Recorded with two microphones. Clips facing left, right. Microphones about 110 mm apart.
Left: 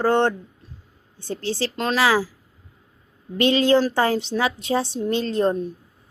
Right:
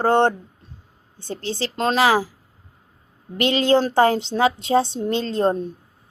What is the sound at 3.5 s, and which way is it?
A woman's voice, 25° right (ahead or behind).